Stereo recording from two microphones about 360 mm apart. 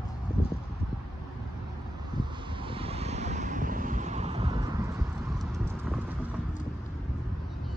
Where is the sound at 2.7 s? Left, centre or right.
Centre.